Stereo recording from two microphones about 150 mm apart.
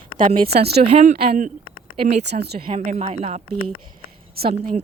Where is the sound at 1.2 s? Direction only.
60° right (ahead or behind).